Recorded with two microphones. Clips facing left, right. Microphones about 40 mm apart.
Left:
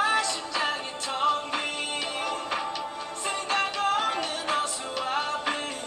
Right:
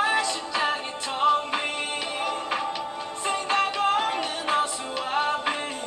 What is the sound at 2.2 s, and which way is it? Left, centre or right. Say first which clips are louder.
Music: right 4 dB; right.